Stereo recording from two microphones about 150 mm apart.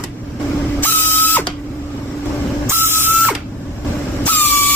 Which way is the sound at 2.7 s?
15° right (ahead or behind).